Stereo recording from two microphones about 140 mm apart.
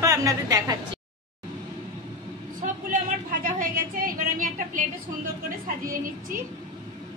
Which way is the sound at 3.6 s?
80° right.